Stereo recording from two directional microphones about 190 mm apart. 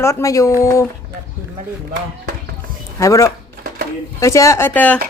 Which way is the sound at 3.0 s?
15° left (ahead or behind).